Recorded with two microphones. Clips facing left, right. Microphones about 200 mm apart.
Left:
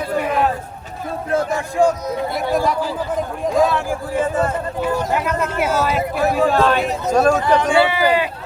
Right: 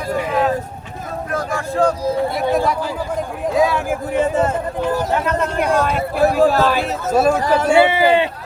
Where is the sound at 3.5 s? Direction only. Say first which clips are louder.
Even; 10° right (ahead or behind).